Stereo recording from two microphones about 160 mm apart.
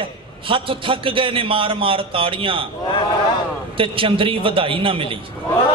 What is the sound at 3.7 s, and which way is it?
A man's voice, 35° right (ahead or behind).